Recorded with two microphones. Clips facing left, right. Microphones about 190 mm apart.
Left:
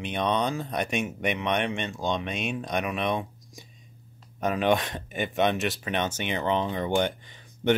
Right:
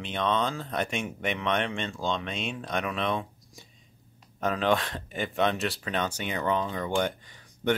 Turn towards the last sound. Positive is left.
turn(degrees=20)  # may be behind; listen again after turning